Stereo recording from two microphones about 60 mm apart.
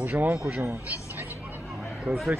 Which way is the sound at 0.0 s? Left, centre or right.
Right.